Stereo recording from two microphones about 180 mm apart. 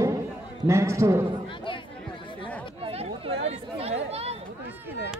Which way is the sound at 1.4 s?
30° left (ahead or behind).